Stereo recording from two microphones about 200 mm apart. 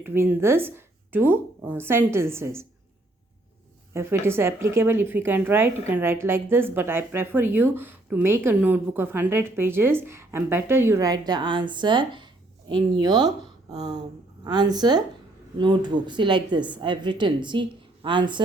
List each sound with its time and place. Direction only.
0.0 s a woman's voice: 10° right (ahead or behind)
3.9 s a woman's voice: 10° right (ahead or behind)